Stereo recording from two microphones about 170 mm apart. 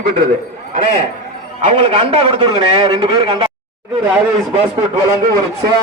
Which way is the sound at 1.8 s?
35° right (ahead or behind).